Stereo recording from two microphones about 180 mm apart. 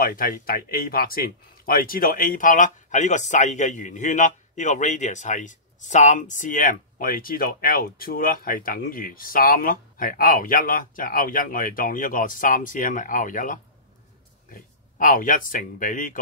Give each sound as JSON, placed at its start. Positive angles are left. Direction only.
{"t": 0.1, "sound": "speech", "side_deg": 50}